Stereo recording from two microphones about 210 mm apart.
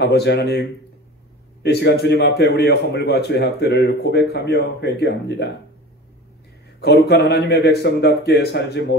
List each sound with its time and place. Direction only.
0.0 s a man's voice: 50° left (ahead or behind)
6.8 s a man's voice: 50° left (ahead or behind)